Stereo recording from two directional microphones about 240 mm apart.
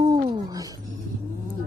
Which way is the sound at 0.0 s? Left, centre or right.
Centre.